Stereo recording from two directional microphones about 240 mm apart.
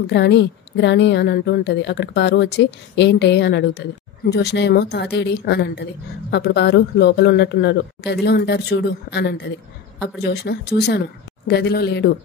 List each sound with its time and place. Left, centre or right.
0.0 s a woman's voice: left